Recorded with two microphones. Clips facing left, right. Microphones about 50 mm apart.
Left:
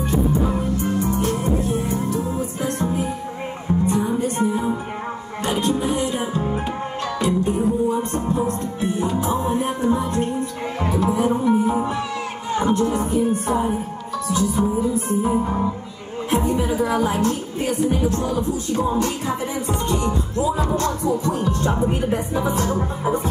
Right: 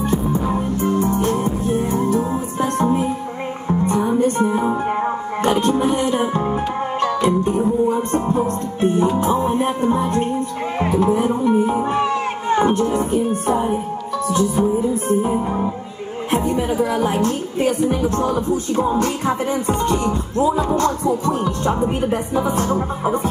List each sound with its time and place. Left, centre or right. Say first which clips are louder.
0.0 s music: even; right
15.3 s music: right 1 dB; centre
16.3 s a sound: right 1 dB; right
17.0 s music: right 2 dB; right